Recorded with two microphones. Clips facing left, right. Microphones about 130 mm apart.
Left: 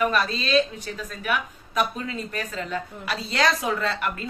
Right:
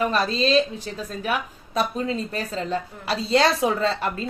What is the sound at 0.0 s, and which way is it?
A woman's voice, 30° right (ahead or behind).